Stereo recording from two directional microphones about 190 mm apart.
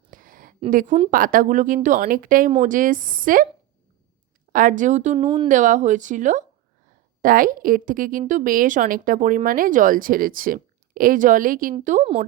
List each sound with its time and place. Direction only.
0.1 s a sound: 45° right (ahead or behind)
0.7 s speech: 45° right (ahead or behind)
4.5 s speech: 45° right (ahead or behind)
5.2 s speech: 25° right (ahead or behind)
5.5 s speech: 40° right (ahead or behind)
11.9 s speech: 35° right (ahead or behind)